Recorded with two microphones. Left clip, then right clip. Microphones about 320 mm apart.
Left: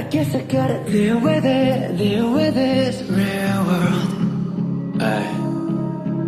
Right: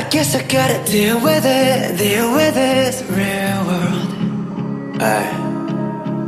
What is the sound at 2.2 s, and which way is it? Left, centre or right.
Music, right.